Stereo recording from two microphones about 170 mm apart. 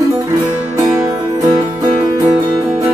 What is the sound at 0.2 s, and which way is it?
Music, 20° right (ahead or behind).